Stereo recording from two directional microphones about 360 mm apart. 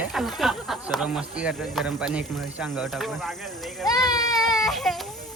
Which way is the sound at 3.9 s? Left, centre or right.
Centre.